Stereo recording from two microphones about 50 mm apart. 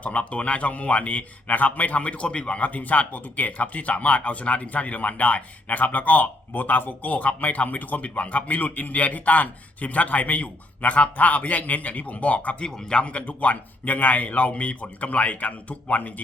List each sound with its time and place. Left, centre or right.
0.0 s a man's voice: left
12.6 s a man's voice: centre; by 16.2 s left